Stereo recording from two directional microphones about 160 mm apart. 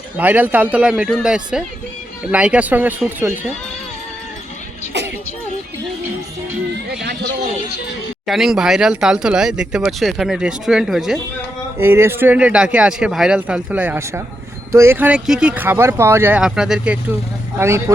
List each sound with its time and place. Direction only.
0.2 s speech: 10° right (ahead or behind)
4.9 s music: 90° right
7.0 s a man's voice: 90° right
8.3 s speech: centre (ahead or behind)
11.8 s speech: 15° right (ahead or behind)
17.6 s speech: 15° right (ahead or behind)